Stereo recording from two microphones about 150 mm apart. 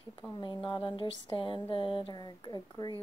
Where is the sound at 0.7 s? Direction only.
30° left (ahead or behind).